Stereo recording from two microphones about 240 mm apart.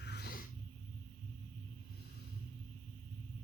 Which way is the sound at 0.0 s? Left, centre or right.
Left.